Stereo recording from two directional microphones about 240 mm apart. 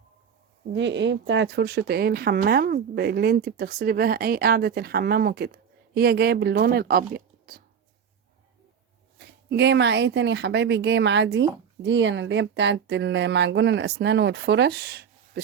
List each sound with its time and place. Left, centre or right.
0.7 s speech: right
9.1 s speech: right